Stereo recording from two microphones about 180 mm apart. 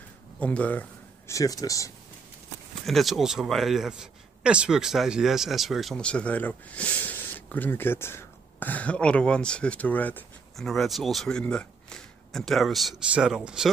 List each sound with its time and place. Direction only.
0.4 s speech: 10° left (ahead or behind)
2.8 s speech: centre (ahead or behind)